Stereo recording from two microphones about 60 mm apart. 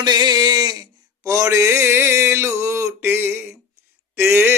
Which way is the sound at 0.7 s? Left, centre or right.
Right.